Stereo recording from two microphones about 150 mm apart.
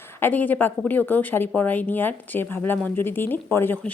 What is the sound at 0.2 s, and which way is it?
A woman's voice, 10° left (ahead or behind).